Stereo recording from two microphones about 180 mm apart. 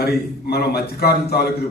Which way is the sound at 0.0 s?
60° left (ahead or behind).